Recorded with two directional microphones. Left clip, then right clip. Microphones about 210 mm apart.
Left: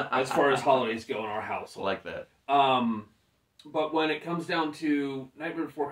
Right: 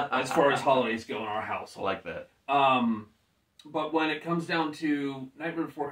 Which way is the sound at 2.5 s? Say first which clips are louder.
Even; 10° right (ahead or behind).